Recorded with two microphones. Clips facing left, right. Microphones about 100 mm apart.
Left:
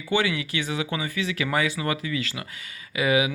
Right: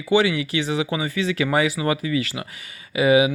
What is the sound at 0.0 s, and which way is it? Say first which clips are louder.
Speech: right 6 dB; 20° right (ahead or behind).